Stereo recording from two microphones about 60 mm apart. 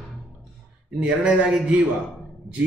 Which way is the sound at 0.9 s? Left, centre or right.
Centre.